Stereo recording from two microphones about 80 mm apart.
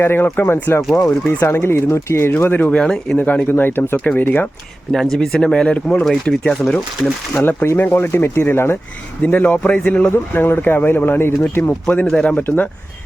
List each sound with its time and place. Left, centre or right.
0.0 s speech: left
2.6 s speech: centre
3.2 s speech: left
5.1 s speech: centre
7.4 s speech: left
9.2 s speech: centre
10.1 s speech: left
12.0 s speech: centre
12.4 s speech: left